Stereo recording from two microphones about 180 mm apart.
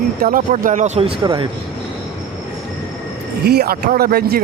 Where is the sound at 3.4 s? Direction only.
60° right (ahead or behind).